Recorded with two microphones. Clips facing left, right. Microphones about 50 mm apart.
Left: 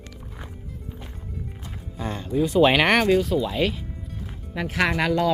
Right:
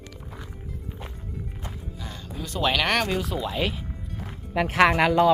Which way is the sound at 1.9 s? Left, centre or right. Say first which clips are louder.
Left 8 dB; left.